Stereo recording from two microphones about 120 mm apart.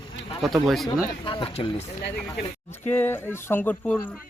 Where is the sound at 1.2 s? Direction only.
45° left (ahead or behind).